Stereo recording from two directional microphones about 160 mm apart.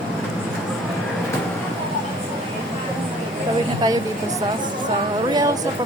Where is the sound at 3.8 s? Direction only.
25° right (ahead or behind).